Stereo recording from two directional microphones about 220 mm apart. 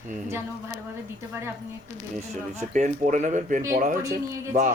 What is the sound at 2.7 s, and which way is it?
Speech, 35° right (ahead or behind).